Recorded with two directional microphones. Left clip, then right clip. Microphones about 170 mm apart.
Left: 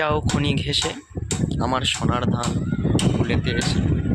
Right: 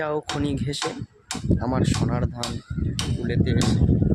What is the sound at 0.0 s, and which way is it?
Speech, 20° right (ahead or behind).